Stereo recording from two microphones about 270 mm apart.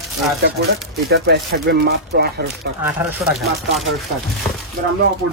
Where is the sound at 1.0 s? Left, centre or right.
Right.